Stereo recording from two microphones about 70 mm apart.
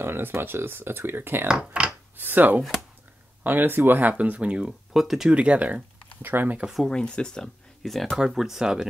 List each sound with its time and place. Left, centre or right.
0.0 s speech: right
1.5 s speech: centre
2.1 s speech: right
4.9 s speech: centre
5.3 s speech: centre
6.6 s speech: centre
6.9 s speech: centre